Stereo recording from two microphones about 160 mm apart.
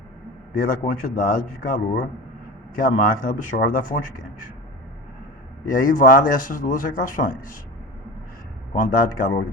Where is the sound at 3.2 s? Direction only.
60° left (ahead or behind).